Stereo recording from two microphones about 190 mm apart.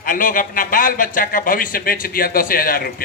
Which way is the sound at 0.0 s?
45° left (ahead or behind).